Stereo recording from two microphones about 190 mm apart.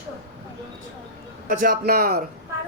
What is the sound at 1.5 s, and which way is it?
Speech, 45° right (ahead or behind).